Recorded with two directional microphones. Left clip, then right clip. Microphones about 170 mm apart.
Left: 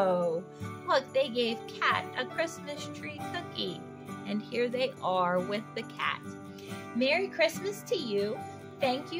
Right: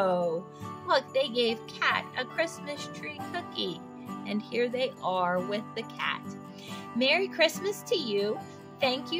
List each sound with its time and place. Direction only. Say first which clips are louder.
0.0 s music: right 1 dB; 10° right (ahead or behind)
0.8 s speech: right 1 dB; 15° right (ahead or behind)
7.0 s speech: right 2 dB; 20° right (ahead or behind)